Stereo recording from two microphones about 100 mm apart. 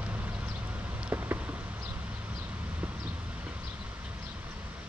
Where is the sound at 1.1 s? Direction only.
15° right (ahead or behind).